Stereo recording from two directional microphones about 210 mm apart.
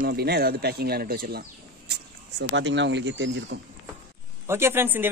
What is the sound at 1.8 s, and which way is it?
Speech, 55° right (ahead or behind).